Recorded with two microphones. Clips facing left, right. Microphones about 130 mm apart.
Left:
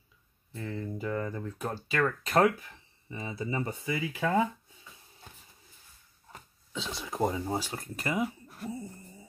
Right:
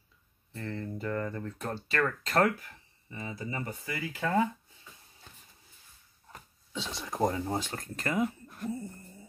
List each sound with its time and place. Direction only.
0.5 s speech: 10° left (ahead or behind)
6.3 s speech: centre (ahead or behind)